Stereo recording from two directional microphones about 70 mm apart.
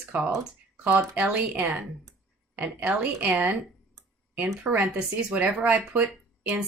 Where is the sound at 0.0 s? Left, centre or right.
Centre.